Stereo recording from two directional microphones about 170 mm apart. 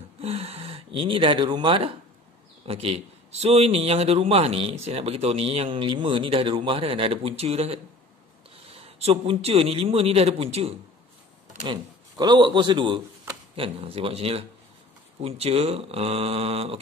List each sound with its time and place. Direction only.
0.2 s a man's voice: 35° right (ahead or behind)
11.6 s a man's voice: 25° right (ahead or behind)